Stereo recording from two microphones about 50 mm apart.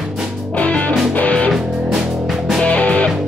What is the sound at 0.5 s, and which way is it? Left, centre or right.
Music, left.